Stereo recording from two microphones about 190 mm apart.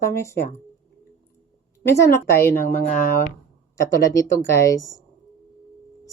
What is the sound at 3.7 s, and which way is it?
Speech, 15° left (ahead or behind).